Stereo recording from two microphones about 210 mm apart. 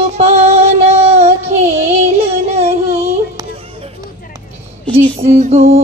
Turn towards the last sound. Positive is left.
turn(degrees=-30)  # may be behind; listen again after turning